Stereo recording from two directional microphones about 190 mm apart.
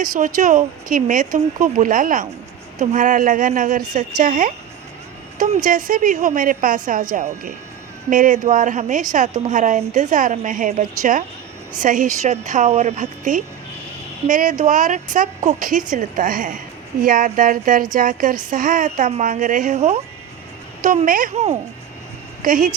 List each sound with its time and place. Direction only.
0.3 s a woman's voice: 40° right (ahead or behind)